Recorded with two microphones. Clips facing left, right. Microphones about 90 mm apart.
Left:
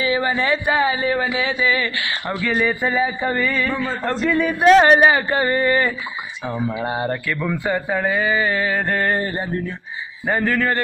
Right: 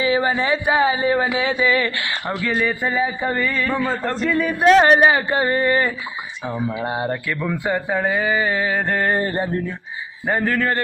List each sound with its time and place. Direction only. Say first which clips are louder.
0.0 s speech: right 1 dB; 30° right (ahead or behind)
1.4 s speech: right 2 dB; 45° right (ahead or behind)
2.6 s mantra: left 2 dB; 5° left (ahead or behind)
5.3 s speech: even; 10° right (ahead or behind)
10.2 s mantra: even; 5° right (ahead or behind)